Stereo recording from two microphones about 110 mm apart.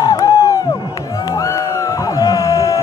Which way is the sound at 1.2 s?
35° left (ahead or behind).